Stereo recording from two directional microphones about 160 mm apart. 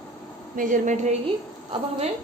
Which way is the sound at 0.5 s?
55° right (ahead or behind).